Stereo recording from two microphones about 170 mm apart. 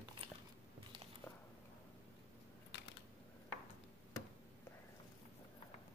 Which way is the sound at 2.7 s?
90° left.